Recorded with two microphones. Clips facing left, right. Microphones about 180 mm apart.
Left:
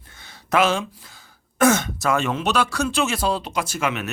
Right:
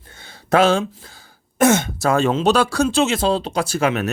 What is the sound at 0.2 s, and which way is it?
Speech, 30° right (ahead or behind).